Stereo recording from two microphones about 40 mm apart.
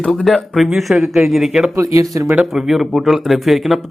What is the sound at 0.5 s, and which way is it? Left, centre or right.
Speech, centre.